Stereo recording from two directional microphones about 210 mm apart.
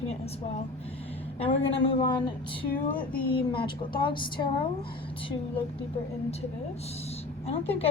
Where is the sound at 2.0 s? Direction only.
20° left (ahead or behind).